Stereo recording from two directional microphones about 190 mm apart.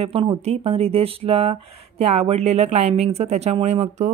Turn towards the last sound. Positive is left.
turn(degrees=-35)  # may be behind; listen again after turning